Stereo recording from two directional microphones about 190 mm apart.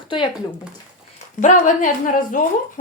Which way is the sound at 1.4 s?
45° left (ahead or behind).